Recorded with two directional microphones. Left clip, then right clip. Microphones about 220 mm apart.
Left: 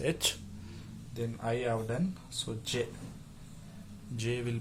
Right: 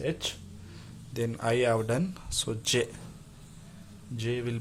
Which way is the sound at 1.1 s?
35° right (ahead or behind).